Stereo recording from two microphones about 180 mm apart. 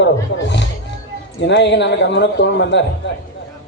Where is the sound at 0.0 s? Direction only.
80° left.